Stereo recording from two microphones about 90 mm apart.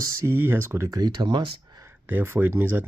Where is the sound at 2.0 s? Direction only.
25° right (ahead or behind).